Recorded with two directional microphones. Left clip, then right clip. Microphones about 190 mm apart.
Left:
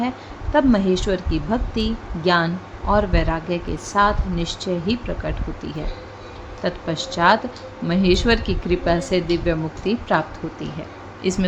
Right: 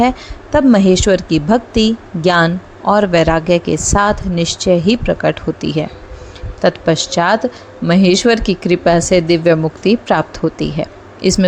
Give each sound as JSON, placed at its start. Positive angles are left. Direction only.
{"t": 0.5, "sound": "a woman's voice", "side_deg": -40}